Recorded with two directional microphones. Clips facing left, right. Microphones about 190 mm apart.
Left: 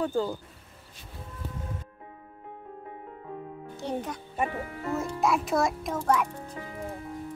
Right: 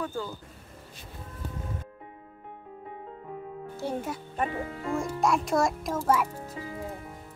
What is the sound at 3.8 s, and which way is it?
Speech, 10° right (ahead or behind).